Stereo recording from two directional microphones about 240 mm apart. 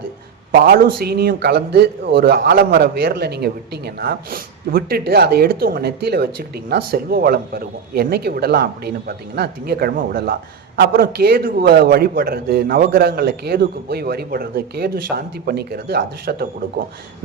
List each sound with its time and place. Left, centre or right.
0.6 s a man's voice: right